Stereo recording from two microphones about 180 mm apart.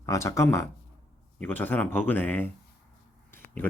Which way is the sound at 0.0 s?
15° left (ahead or behind).